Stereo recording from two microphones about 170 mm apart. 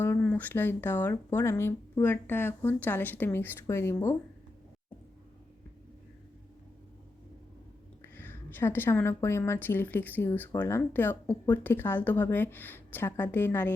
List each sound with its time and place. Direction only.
0.0 s a woman's voice: 10° left (ahead or behind)
8.0 s a woman's voice: 15° left (ahead or behind)